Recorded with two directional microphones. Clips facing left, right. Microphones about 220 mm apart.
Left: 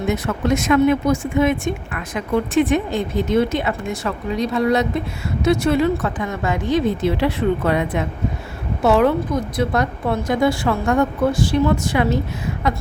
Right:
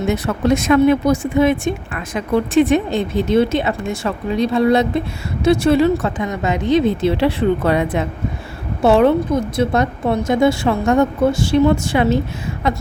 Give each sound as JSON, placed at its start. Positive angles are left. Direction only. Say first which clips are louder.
{"t": 0.7, "sound": "a woman's voice", "louder": "right 2 dB", "side_deg": -35}